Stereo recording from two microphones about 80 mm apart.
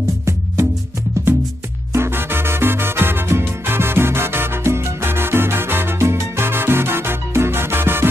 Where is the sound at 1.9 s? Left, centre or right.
Right.